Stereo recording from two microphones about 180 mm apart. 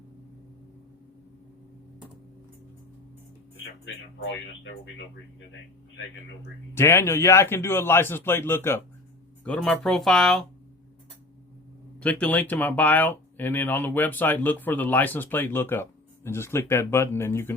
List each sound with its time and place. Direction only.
4.2 s speech: 90° left
6.7 s speech: 15° left (ahead or behind)
11.9 s speech: 10° left (ahead or behind)